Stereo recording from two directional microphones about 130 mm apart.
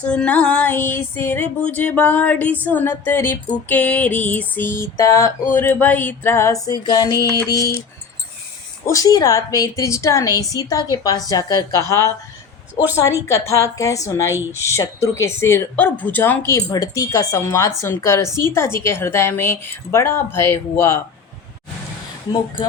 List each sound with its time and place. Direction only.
0.0 s female singing: 10° left (ahead or behind); by 5.3 s 25° left (ahead or behind)
5.5 s speech: 15° left (ahead or behind)
8.9 s speech: 25° left (ahead or behind)